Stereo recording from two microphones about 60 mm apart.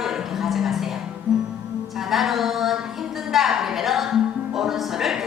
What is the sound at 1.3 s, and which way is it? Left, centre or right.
Music, centre.